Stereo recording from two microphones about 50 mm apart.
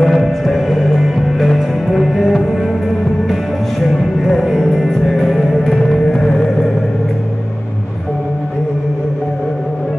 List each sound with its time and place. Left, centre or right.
0.0 s music: centre
3.8 s music: centre